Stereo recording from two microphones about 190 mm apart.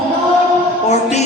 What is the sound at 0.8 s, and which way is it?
Speech, 35° left (ahead or behind).